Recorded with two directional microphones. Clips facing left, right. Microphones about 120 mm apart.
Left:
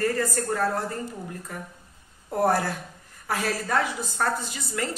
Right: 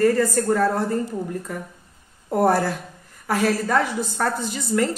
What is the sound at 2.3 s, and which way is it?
A woman's voice, 45° right (ahead or behind).